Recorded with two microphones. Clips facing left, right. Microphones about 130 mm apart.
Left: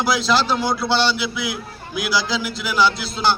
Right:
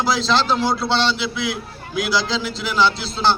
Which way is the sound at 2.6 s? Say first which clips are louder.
Even; 5° left (ahead or behind).